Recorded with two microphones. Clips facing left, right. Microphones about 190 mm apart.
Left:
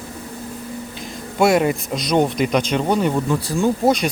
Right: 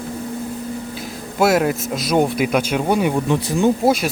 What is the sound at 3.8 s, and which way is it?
Speech, 5° right (ahead or behind).